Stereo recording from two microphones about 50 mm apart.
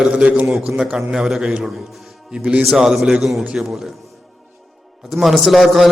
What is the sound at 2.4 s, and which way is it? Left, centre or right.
Speech, right.